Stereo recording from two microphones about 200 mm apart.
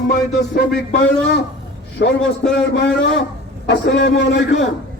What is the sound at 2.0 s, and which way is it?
A man's voice, 60° left (ahead or behind).